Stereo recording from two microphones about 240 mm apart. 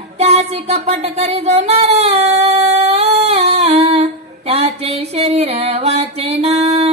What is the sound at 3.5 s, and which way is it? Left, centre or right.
Humming, right.